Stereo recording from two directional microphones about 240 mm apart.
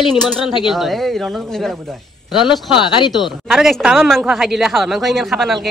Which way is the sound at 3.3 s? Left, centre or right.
Centre.